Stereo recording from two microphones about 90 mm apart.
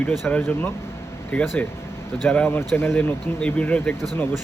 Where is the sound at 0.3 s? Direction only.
15° left (ahead or behind).